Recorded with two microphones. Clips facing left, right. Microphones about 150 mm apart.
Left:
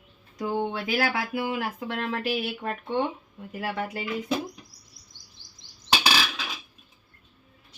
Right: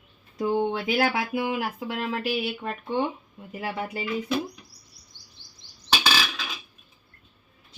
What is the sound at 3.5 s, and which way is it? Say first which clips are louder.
Speech: even; 15° right (ahead or behind).